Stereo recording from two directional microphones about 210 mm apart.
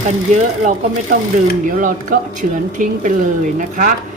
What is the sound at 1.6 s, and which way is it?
A woman's voice, 40° right (ahead or behind).